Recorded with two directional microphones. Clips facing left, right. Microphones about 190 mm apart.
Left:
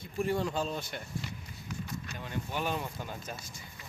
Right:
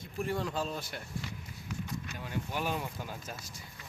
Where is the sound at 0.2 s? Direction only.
Centre (ahead or behind).